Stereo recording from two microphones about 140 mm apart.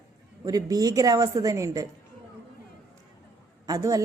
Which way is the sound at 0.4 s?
25° right (ahead or behind).